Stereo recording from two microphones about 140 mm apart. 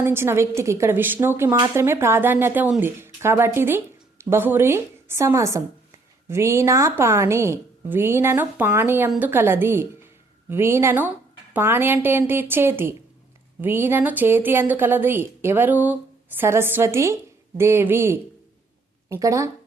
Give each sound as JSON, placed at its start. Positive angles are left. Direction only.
{"t": 0.0, "sound": "a woman's voice", "side_deg": -15}